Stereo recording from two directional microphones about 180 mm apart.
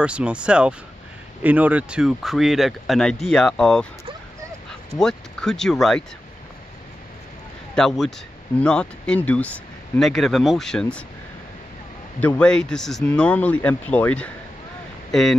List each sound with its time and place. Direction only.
0.0 s speech: 5° right (ahead or behind)
5.0 s speech: 5° left (ahead or behind)
7.7 s speech: centre (ahead or behind)
12.2 s speech: 10° left (ahead or behind)